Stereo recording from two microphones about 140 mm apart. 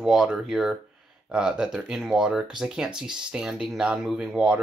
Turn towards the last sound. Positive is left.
turn(degrees=-5)  # may be behind; listen again after turning